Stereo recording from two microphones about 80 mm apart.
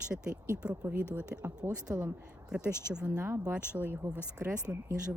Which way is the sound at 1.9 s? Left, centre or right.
Right.